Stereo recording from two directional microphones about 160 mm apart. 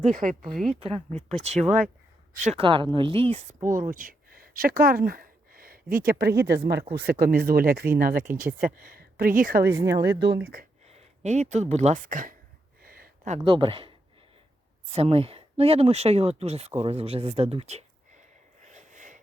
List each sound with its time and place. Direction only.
0.0 s speech: 55° right (ahead or behind)
0.7 s speech: 35° right (ahead or behind)
2.6 s speech: 30° right (ahead or behind)
3.6 s speech: 55° right (ahead or behind); by 6.3 s 70° right (ahead or behind)
6.3 s speech: 20° right (ahead or behind)
6.9 s speech: 75° right (ahead or behind)
9.6 s speech: 20° right (ahead or behind)
10.2 s speech: 90° right
10.8 s speech: 45° right (ahead or behind)
12.8 s a sound: 65° right (ahead or behind)
13.2 s speech: 40° right (ahead or behind)
14.9 s speech: 40° right (ahead or behind)
18.6 s a sound: 50° right (ahead or behind)